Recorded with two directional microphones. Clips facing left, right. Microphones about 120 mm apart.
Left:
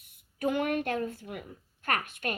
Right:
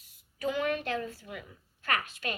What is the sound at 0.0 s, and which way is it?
Speech, 55° left (ahead or behind).